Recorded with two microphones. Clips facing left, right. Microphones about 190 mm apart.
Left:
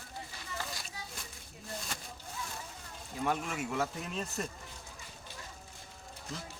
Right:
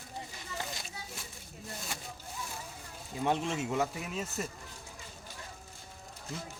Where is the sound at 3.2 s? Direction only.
25° right (ahead or behind).